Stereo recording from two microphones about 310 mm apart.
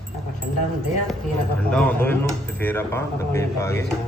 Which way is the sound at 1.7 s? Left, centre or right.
Centre.